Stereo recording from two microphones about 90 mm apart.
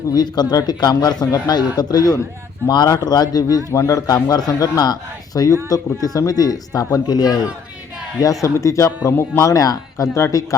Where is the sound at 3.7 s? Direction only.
35° left (ahead or behind).